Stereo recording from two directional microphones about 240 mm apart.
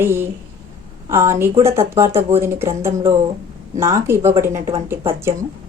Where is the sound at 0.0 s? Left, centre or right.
Centre.